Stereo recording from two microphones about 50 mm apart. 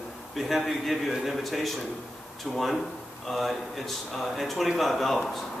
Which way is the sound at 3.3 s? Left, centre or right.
Centre.